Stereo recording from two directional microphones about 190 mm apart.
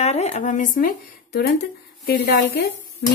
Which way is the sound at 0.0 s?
35° left (ahead or behind).